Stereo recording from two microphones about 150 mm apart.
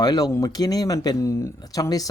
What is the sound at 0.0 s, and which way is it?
Speech, 25° left (ahead or behind).